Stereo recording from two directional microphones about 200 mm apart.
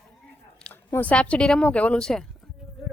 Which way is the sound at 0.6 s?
10° left (ahead or behind).